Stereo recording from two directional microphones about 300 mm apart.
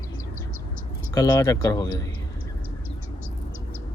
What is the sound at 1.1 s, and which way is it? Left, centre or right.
Speech, centre.